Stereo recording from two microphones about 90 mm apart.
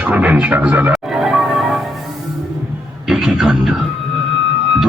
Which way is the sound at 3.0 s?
5° right (ahead or behind).